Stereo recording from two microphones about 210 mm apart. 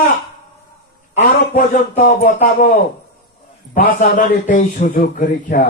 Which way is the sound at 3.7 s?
40° left (ahead or behind).